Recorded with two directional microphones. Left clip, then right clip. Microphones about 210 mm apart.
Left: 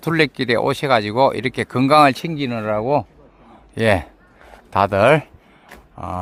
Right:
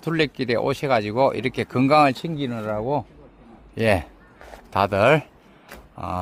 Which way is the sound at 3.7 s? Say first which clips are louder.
Left 3 dB; 15° left (ahead or behind).